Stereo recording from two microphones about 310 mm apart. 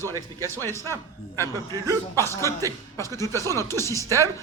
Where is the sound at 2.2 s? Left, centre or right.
Centre.